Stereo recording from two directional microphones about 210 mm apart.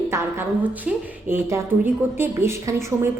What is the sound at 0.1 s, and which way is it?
Speech, 10° right (ahead or behind).